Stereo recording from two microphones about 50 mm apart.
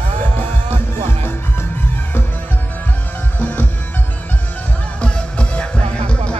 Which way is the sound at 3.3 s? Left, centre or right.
Left.